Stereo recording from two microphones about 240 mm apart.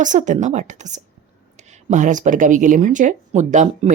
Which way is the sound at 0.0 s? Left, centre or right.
Right.